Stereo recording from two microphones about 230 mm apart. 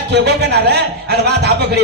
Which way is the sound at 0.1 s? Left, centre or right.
Right.